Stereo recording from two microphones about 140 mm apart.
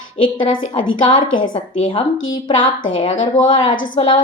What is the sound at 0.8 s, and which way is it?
Speech, 35° left (ahead or behind).